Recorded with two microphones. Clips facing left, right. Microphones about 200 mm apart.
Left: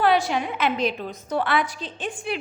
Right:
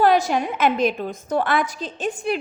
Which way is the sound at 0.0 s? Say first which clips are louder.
Right 3 dB; 45° right (ahead or behind).